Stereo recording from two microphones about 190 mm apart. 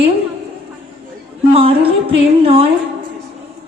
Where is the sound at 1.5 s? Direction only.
30° right (ahead or behind).